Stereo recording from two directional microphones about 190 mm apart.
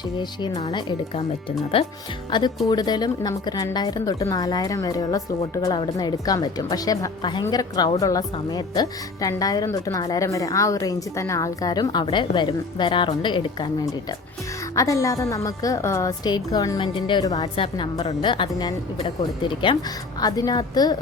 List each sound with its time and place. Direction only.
0.2 s a woman's voice: 25° left (ahead or behind)